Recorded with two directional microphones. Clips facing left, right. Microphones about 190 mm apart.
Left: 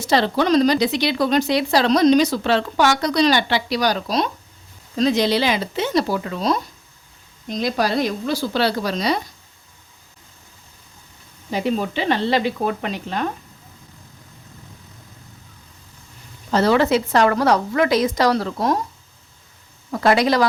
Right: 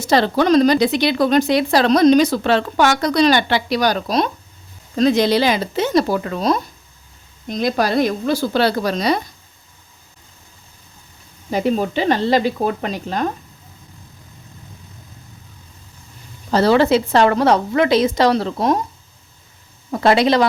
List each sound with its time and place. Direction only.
0.0 s speech: 45° right (ahead or behind)
11.5 s speech: 45° right (ahead or behind)
16.5 s a woman's voice: 35° right (ahead or behind)
19.9 s a woman's voice: 25° right (ahead or behind)